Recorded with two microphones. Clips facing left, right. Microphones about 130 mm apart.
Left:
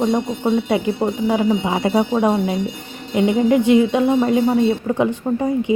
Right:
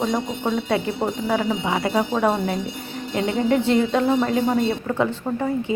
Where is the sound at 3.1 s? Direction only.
15° left (ahead or behind).